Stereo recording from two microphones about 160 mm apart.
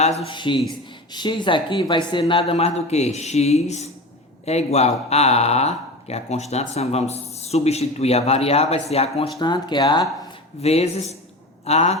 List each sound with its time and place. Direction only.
0.0 s speech: 35° left (ahead or behind)
9.4 s speech: 30° left (ahead or behind)
10.6 s speech: 40° left (ahead or behind)